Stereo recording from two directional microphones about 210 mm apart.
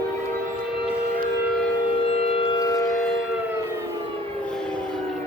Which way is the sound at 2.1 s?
30° left (ahead or behind).